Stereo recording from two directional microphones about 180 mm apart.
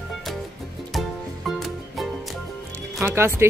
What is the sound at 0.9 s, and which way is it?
Music, centre (ahead or behind).